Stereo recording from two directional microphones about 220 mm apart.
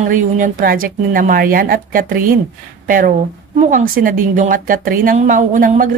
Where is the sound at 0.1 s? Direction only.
40° right (ahead or behind).